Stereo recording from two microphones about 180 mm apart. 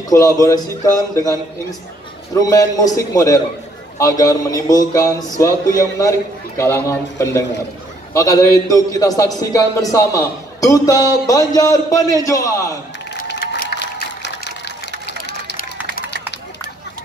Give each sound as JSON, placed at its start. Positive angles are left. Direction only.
{"t": 0.1, "sound": "a man's voice", "side_deg": 20}
{"t": 13.3, "sound": "a sound", "side_deg": 70}
{"t": 15.2, "sound": "run", "side_deg": 70}